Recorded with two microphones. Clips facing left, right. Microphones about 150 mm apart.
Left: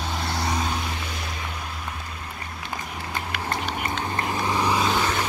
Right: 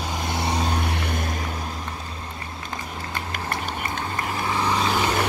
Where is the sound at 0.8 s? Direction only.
60° right (ahead or behind).